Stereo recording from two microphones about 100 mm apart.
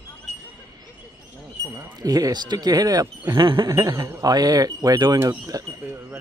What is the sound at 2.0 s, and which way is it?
Speech, 40° right (ahead or behind).